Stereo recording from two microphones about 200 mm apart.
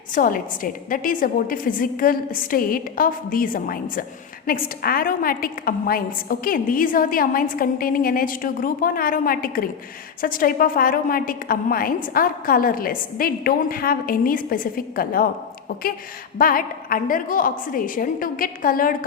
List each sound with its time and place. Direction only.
0.1 s a woman's voice: 45° left (ahead or behind)
16.4 s a woman's voice: 45° left (ahead or behind)